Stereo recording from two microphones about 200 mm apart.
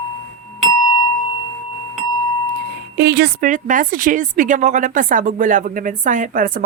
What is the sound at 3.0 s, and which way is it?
A woman's voice, 55° right (ahead or behind).